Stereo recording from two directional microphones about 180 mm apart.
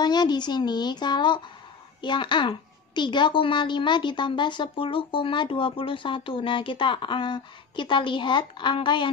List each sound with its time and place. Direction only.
0.0 s a child's voice: 25° left (ahead or behind)